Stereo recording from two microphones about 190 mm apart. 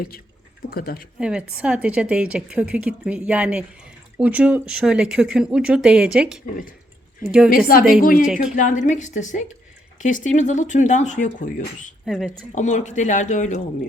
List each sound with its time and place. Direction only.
0.7 s speech: 50° left (ahead or behind)
1.2 s a woman's voice: 5° right (ahead or behind)
8.0 s speech: 45° left (ahead or behind)
8.3 s a woman's voice: 5° right (ahead or behind)
8.5 s speech: 40° left (ahead or behind)
12.0 s a woman's voice: centre (ahead or behind)
12.5 s speech: 40° left (ahead or behind)